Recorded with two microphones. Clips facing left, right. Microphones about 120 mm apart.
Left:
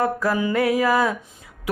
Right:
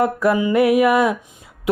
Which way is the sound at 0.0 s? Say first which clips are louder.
Right 4 dB; 20° right (ahead or behind).